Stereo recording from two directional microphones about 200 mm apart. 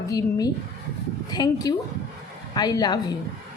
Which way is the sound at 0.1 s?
20° left (ahead or behind).